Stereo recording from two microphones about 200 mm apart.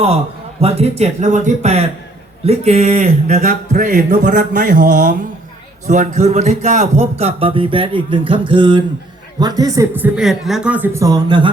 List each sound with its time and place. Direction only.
0.6 s a man's voice: 30° right (ahead or behind)